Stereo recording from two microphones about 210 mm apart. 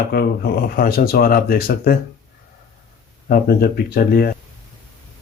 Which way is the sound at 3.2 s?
45° left (ahead or behind).